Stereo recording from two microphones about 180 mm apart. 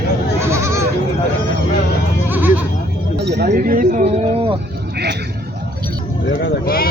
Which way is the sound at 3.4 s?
50° right (ahead or behind).